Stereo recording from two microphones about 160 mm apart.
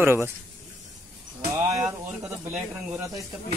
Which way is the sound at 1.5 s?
10° right (ahead or behind).